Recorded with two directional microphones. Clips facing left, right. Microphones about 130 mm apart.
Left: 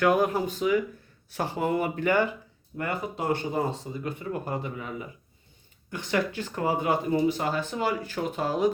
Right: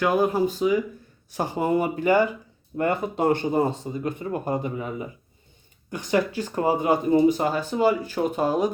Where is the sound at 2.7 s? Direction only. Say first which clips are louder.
Right 7 dB; 25° right (ahead or behind).